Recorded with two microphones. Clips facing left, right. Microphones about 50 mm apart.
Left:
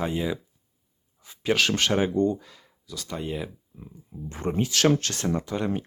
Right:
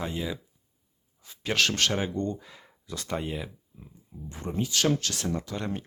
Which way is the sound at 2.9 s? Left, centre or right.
Right.